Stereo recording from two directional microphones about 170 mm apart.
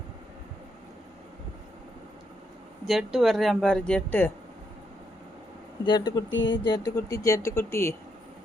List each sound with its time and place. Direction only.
2.8 s speech: centre (ahead or behind)
5.8 s speech: 25° left (ahead or behind)
6.3 s speech: 90° left
6.7 s speech: 25° left (ahead or behind)